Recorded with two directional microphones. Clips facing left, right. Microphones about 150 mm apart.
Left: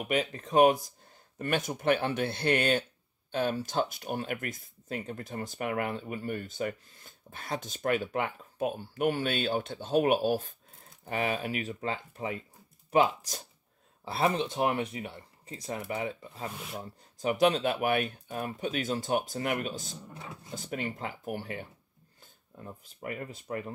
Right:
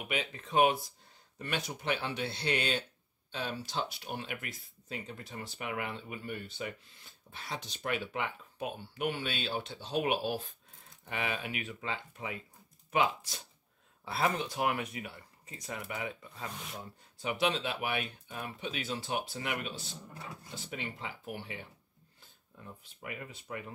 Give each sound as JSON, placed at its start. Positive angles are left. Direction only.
{"t": 0.0, "sound": "speech", "side_deg": 45}
{"t": 14.0, "sound": "speech", "side_deg": 25}
{"t": 17.2, "sound": "speech", "side_deg": 45}